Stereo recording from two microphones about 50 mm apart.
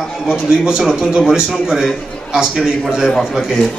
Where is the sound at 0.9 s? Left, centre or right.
Centre.